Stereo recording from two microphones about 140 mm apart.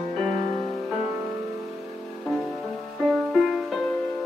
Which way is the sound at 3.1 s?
Centre (ahead or behind).